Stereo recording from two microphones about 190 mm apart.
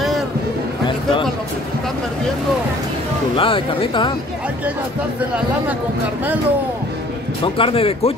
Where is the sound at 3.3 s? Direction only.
30° left (ahead or behind).